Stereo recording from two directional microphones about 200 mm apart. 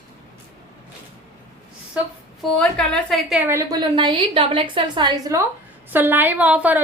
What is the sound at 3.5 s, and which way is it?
A woman's voice, 20° right (ahead or behind).